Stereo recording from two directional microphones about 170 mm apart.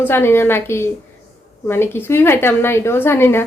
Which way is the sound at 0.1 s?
15° left (ahead or behind).